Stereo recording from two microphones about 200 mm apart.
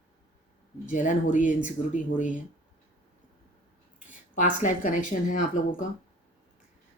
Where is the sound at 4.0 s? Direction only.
40° left (ahead or behind).